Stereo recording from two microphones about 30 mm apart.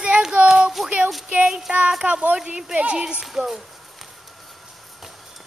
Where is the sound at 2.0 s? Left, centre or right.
Right.